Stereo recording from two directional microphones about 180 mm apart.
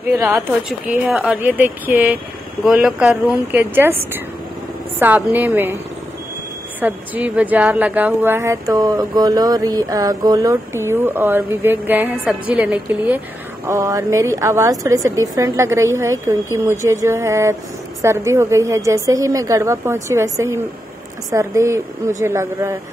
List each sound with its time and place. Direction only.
0.1 s a woman's voice: 10° right (ahead or behind)
6.8 s a woman's voice: 10° right (ahead or behind)